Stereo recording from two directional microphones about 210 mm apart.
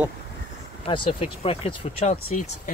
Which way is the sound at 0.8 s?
25° left (ahead or behind).